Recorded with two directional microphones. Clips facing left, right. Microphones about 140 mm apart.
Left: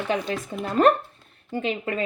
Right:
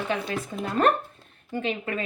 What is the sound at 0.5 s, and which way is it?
Speech, 20° left (ahead or behind).